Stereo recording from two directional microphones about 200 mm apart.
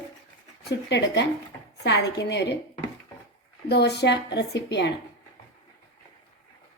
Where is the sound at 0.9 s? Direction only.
60° left (ahead or behind).